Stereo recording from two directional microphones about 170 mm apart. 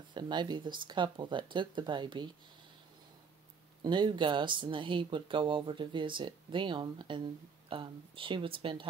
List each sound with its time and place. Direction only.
0.1 s speech: 25° right (ahead or behind)
3.8 s speech: 25° right (ahead or behind)